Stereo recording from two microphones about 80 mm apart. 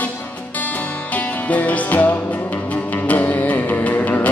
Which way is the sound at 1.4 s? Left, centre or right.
Centre.